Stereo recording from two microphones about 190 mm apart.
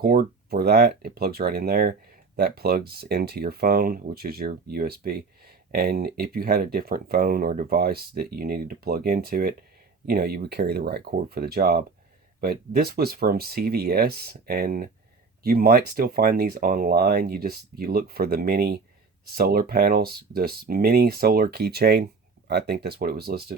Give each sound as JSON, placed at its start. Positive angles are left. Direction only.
{"t": 0.0, "sound": "speech", "side_deg": -50}